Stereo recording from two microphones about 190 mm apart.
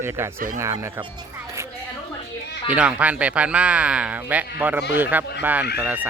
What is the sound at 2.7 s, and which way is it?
Speech, 5° right (ahead or behind).